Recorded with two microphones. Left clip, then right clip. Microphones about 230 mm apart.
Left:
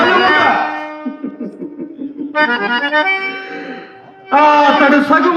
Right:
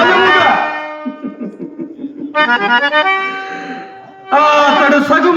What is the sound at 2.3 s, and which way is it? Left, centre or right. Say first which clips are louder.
Accordion: right 3 dB; right.